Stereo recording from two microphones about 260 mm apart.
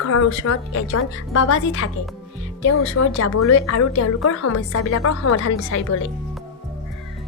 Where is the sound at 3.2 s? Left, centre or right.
Left.